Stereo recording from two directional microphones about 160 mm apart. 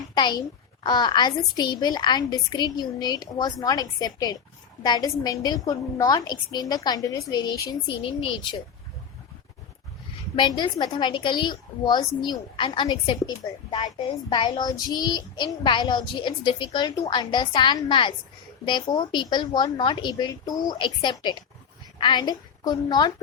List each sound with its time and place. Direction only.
0.1 s a child's voice: 30° left (ahead or behind)
0.9 s child singing: 25° left (ahead or behind)
10.3 s child singing: 30° left (ahead or behind)